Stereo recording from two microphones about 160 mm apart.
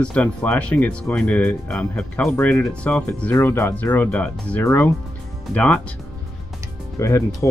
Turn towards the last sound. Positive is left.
turn(degrees=20)  # may be behind; listen again after turning